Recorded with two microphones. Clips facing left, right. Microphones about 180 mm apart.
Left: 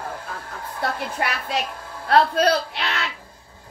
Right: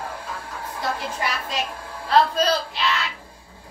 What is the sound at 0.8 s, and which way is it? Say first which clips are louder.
A man's voice: left 2 dB; 60° left (ahead or behind).